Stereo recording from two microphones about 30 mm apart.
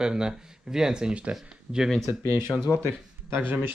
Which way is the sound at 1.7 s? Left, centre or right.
Right.